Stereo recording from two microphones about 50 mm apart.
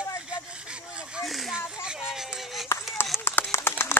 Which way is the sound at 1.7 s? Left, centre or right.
Centre.